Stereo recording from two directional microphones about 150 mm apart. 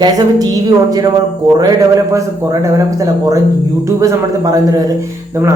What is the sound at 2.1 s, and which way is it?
Speech, 20° right (ahead or behind).